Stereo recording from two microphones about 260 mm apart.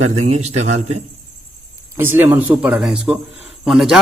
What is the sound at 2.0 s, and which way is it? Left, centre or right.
A man's voice, centre.